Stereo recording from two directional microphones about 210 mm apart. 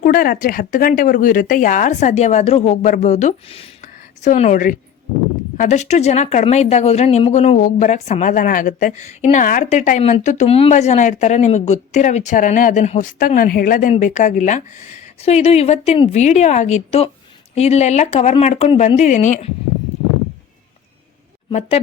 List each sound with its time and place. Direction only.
0.0 s speech: 40° left (ahead or behind)